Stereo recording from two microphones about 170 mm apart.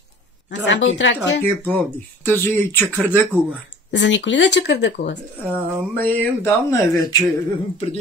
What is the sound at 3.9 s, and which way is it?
Speech, 90° left.